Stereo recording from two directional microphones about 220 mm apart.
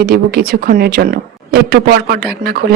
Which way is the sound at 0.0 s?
45° right (ahead or behind).